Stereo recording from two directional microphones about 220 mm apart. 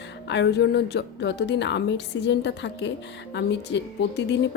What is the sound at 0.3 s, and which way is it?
A woman's voice, 50° left (ahead or behind).